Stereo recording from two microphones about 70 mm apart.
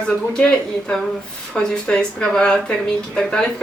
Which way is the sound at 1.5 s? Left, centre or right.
Centre.